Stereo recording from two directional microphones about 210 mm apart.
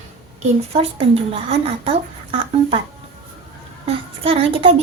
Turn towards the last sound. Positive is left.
turn(degrees=-25)  # may be behind; listen again after turning